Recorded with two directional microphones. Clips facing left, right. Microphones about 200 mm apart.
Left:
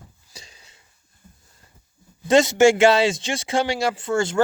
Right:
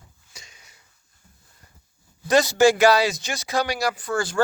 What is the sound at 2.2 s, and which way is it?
Speech, 25° left (ahead or behind).